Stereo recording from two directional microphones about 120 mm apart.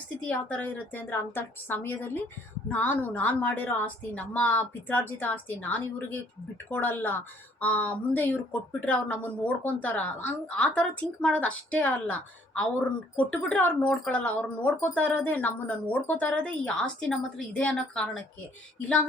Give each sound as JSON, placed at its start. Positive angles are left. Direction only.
{"t": 0.3, "sound": "speech", "side_deg": 10}